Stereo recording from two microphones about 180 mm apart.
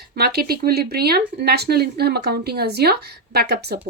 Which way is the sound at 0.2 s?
60° right (ahead or behind).